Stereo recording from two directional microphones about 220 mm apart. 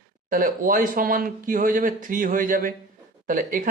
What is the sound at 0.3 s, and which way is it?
Speech, 40° right (ahead or behind).